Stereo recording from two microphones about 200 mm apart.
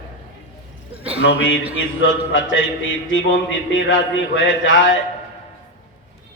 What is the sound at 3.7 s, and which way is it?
A man's voice, 70° left (ahead or behind).